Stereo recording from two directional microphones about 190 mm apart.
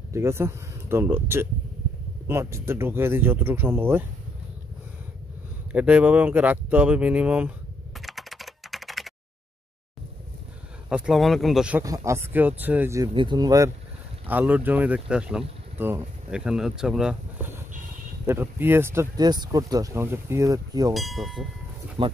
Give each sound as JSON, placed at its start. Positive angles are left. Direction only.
{"t": 0.1, "sound": "speech", "side_deg": -15}
{"t": 5.7, "sound": "speech", "side_deg": -5}
{"t": 8.0, "sound": "computer keyboard", "side_deg": 0}
{"t": 10.9, "sound": "speech", "side_deg": -5}
{"t": 11.8, "sound": "speech", "side_deg": -15}
{"t": 14.2, "sound": "speech", "side_deg": -10}
{"t": 20.9, "sound": "speech", "side_deg": 0}
{"t": 22.0, "sound": "speech", "side_deg": -25}